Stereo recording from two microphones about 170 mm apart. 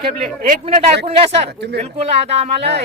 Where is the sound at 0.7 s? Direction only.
35° right (ahead or behind).